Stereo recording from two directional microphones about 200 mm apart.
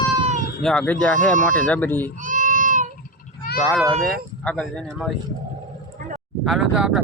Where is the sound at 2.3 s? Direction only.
40° right (ahead or behind).